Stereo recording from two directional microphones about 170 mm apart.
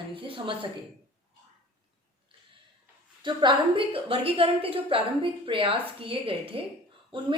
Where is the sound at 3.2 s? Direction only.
30° right (ahead or behind).